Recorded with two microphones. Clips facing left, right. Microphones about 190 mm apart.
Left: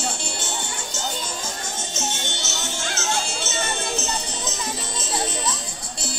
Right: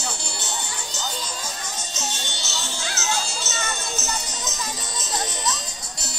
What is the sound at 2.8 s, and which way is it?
Music, 50° left (ahead or behind).